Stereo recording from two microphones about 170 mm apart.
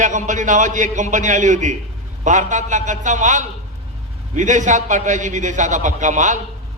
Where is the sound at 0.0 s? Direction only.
45° right (ahead or behind).